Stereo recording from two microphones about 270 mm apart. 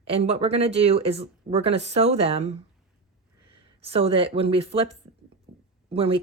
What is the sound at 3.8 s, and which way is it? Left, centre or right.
Speech, right.